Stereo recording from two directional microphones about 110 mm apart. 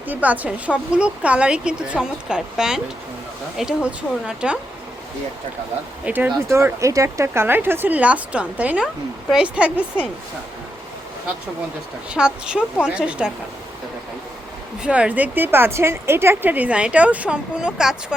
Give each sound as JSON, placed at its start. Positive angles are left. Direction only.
{"t": 0.1, "sound": "a woman's voice", "side_deg": -15}
{"t": 6.1, "sound": "a woman's voice", "side_deg": -10}
{"t": 6.7, "sound": "a woman's voice", "side_deg": -30}
{"t": 12.1, "sound": "a woman's voice", "side_deg": -10}
{"t": 14.8, "sound": "a woman's voice", "side_deg": -10}